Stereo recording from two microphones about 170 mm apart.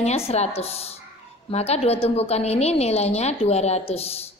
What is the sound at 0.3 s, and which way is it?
A woman's voice, 35° left (ahead or behind).